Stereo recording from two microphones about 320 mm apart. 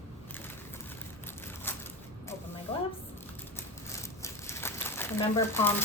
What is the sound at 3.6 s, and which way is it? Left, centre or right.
Crumpling, centre.